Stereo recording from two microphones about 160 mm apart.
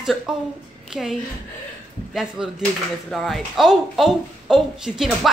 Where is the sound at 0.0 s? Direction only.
5° right (ahead or behind).